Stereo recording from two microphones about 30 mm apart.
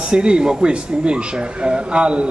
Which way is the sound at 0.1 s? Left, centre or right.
Right.